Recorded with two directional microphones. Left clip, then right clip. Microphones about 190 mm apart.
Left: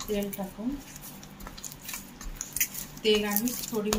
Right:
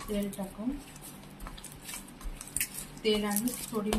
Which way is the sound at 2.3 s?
Centre (ahead or behind).